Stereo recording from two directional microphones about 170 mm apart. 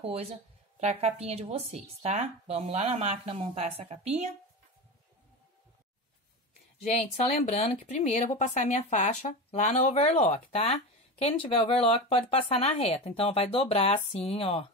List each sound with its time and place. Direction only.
0.0 s a woman's voice: 35° right (ahead or behind)
7.2 s speech: 40° left (ahead or behind)